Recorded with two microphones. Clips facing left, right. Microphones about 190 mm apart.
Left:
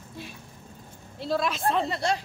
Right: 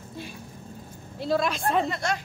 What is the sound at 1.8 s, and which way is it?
Speech, 30° left (ahead or behind).